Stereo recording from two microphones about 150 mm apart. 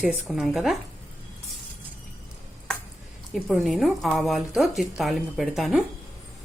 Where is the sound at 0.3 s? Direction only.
5° right (ahead or behind).